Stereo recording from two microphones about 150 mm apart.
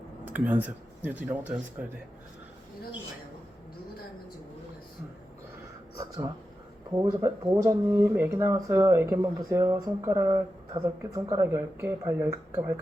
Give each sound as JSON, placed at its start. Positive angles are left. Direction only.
{"t": 0.3, "sound": "speech", "side_deg": -10}
{"t": 6.0, "sound": "speech", "side_deg": -25}